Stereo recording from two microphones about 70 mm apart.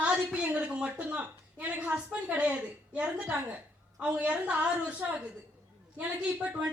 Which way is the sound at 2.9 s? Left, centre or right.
Centre.